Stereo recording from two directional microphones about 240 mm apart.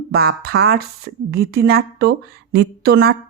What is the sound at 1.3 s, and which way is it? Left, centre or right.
Speech, right.